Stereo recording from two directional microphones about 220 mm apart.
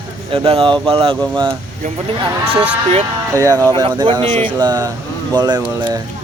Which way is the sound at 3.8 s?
20° right (ahead or behind).